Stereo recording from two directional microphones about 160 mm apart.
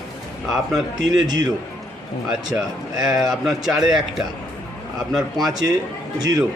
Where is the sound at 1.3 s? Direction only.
25° right (ahead or behind).